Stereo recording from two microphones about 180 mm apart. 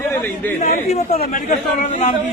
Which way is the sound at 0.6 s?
35° left (ahead or behind).